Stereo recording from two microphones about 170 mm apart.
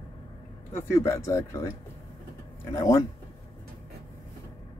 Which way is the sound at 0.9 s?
15° left (ahead or behind).